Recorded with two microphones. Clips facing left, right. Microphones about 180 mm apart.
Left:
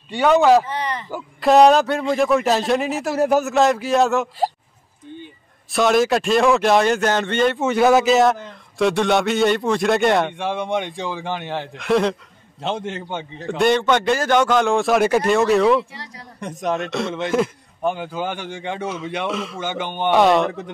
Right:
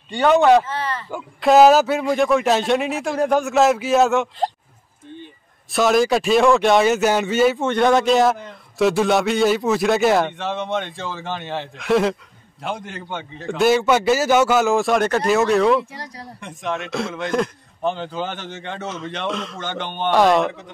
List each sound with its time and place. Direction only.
0.1 s a man's voice: centre (ahead or behind)
0.7 s a sound: 15° left (ahead or behind)
1.1 s a man's voice: centre (ahead or behind)
5.7 s a man's voice: centre (ahead or behind)
10.3 s a man's voice: 10° left (ahead or behind)
11.8 s a man's voice: centre (ahead or behind)
12.5 s a man's voice: 25° left (ahead or behind)
13.5 s a man's voice: 5° right (ahead or behind)
15.9 s speech: 45° right (ahead or behind)
16.3 s a man's voice: 40° left (ahead or behind)
16.7 s a man's voice: centre (ahead or behind)